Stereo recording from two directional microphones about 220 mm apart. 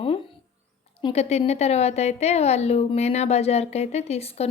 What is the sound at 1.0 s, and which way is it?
A woman's voice, 30° left (ahead or behind).